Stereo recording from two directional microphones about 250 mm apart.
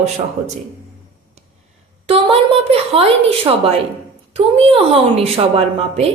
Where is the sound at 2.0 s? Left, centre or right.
Right.